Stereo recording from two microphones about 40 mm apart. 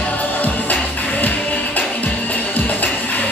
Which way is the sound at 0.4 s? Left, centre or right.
Left.